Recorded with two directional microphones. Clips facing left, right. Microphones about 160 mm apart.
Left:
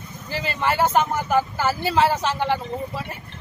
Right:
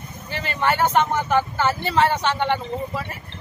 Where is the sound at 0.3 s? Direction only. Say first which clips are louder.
Right 1 dB; 5° left (ahead or behind).